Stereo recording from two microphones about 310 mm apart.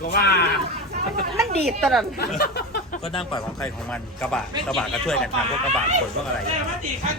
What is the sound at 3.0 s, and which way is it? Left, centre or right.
Speech, centre.